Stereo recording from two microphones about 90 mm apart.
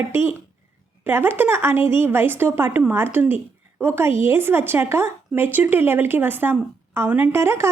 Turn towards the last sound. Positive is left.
turn(degrees=-30)  # may be behind; listen again after turning